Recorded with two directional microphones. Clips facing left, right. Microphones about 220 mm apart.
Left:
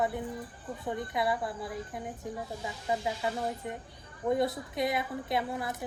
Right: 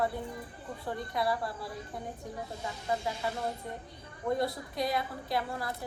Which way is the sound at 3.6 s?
20° left (ahead or behind).